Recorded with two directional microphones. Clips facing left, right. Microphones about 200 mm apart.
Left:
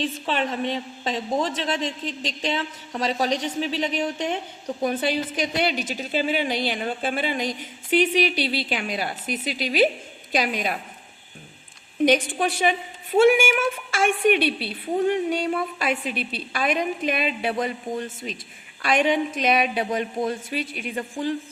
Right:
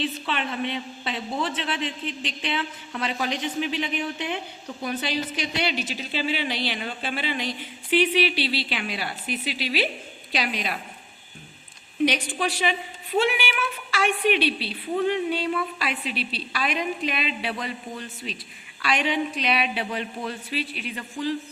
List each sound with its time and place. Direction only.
0.0 s a woman's voice: 40° left (ahead or behind)
12.3 s a woman's voice: 50° left (ahead or behind)